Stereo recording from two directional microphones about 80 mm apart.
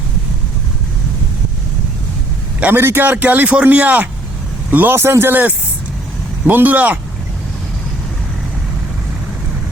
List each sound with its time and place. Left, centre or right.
2.6 s a man's voice: right